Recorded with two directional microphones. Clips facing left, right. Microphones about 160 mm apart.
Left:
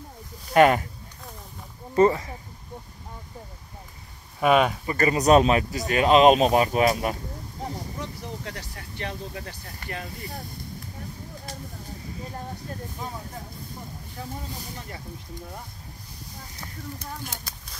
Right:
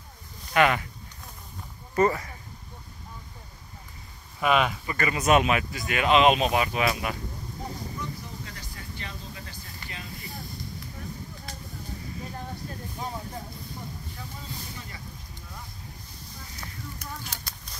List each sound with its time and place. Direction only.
0.5 s speech: 40° left (ahead or behind)
2.0 s speech: 25° left (ahead or behind)
4.4 s speech: 40° left (ahead or behind)
8.0 s vehicle: 70° left (ahead or behind); by 10.0 s 55° left (ahead or behind)